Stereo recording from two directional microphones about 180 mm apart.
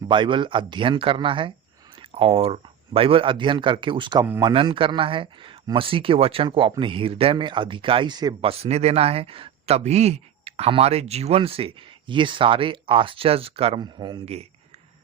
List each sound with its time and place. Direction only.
0.1 s speech: 25° right (ahead or behind)